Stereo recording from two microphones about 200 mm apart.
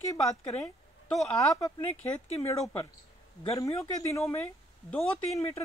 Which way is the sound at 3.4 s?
15° left (ahead or behind).